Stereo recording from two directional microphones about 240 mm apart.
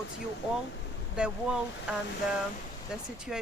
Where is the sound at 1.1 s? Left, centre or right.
Centre.